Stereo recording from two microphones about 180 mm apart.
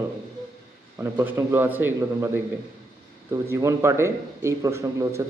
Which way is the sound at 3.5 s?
15° right (ahead or behind).